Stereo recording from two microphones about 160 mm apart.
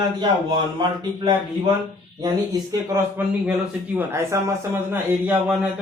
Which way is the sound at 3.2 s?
10° right (ahead or behind).